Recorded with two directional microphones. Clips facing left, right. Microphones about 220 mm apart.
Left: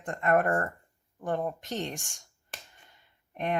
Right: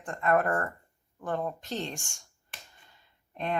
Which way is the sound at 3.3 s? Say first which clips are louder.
Left 1 dB; 15° left (ahead or behind).